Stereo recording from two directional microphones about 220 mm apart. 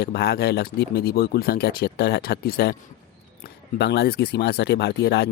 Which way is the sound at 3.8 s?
50° left (ahead or behind).